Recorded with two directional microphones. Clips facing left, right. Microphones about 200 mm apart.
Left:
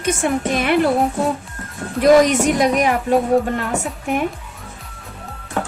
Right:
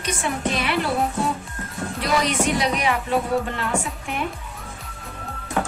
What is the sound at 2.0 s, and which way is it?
Speech, 45° left (ahead or behind).